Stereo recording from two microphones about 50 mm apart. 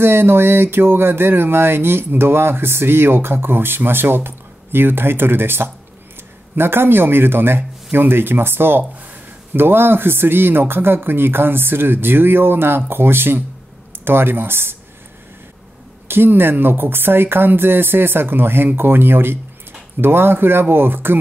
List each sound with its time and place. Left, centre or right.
0.0 s speech: right
16.1 s speech: right